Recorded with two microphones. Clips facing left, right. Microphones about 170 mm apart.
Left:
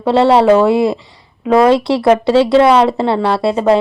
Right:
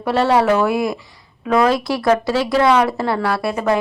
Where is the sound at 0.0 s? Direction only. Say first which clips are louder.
Left 6 dB; 25° left (ahead or behind).